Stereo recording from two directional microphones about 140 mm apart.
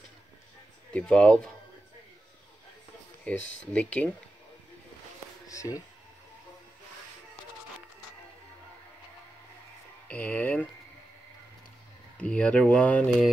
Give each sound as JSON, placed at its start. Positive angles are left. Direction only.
{"t": 0.9, "sound": "speech", "side_deg": 5}
{"t": 3.3, "sound": "speech", "side_deg": 10}
{"t": 5.5, "sound": "speech", "side_deg": 25}
{"t": 10.0, "sound": "speech", "side_deg": 10}
{"t": 12.2, "sound": "speech", "side_deg": 10}